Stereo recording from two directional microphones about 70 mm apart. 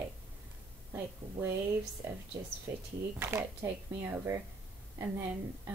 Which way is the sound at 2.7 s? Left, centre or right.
Right.